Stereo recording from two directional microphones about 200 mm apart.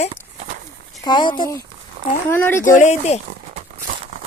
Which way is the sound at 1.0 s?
20° left (ahead or behind).